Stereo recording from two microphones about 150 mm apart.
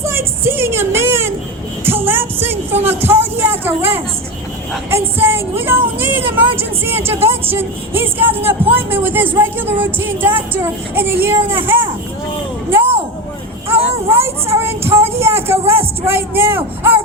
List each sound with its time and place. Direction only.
0.0 s a sound: 15° right (ahead or behind)
1.8 s music: 15° right (ahead or behind)
2.8 s a sound: 15° right (ahead or behind)
4.9 s speech: 15° right (ahead or behind)
7.3 s music: 15° right (ahead or behind)
13.7 s speech: 15° right (ahead or behind)
14.5 s child singing: 15° right (ahead or behind)
16.0 s a man's voice: 15° right (ahead or behind)